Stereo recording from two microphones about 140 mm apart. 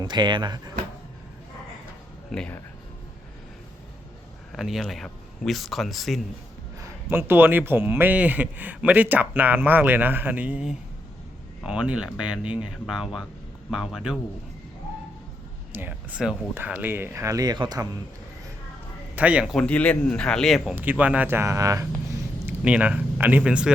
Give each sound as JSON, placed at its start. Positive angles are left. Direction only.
{"t": 0.0, "sound": "speech", "side_deg": -30}
{"t": 2.3, "sound": "speech", "side_deg": 5}
{"t": 4.5, "sound": "speech", "side_deg": 0}
{"t": 6.7, "sound": "a man's voice", "side_deg": -15}
{"t": 15.7, "sound": "a man's voice", "side_deg": -10}
{"t": 19.1, "sound": "a man's voice", "side_deg": -10}
{"t": 19.5, "sound": "speech", "side_deg": 10}
{"t": 20.7, "sound": "a man's voice", "side_deg": -10}
{"t": 22.4, "sound": "speech", "side_deg": -10}